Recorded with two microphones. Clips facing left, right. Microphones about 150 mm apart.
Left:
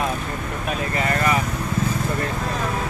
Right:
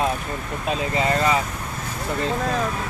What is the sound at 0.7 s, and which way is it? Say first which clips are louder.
Speech: right 2 dB; 20° right (ahead or behind).